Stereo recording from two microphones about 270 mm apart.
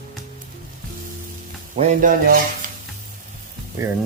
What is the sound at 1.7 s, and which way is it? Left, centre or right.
Speech, right.